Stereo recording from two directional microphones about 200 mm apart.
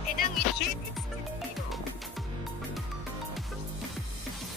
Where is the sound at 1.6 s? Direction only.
Centre (ahead or behind).